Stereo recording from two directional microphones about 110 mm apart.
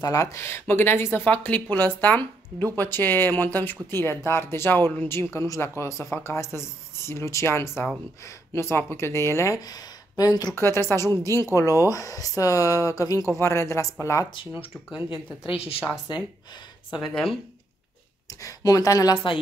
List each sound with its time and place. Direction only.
0.0 s speech: 30° left (ahead or behind)
10.5 s speech: 20° left (ahead or behind)
14.3 s speech: 50° left (ahead or behind)
15.4 s a woman's voice: 60° left (ahead or behind)
16.1 s speech: 45° left (ahead or behind)
16.9 s speech: centre (ahead or behind)
18.4 s speech: 35° left (ahead or behind)